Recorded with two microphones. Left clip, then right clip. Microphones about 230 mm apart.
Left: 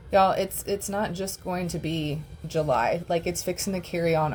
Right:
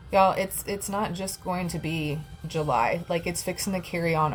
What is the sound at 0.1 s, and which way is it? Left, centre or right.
Speech, centre.